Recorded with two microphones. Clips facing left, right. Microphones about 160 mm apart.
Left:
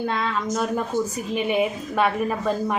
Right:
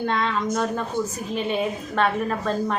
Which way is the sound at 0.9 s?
55° right (ahead or behind).